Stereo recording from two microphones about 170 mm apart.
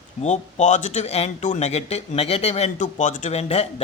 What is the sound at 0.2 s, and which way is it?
Speech, 40° left (ahead or behind).